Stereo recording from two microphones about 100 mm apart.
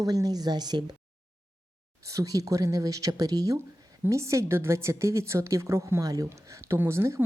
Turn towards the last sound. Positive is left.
turn(degrees=-25)  # may be behind; listen again after turning